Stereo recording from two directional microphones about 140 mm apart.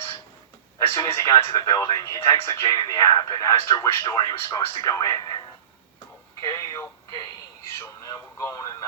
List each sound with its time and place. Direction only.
0.8 s speech: 20° left (ahead or behind)
6.4 s a sound: 25° left (ahead or behind)
7.1 s radio: 25° left (ahead or behind)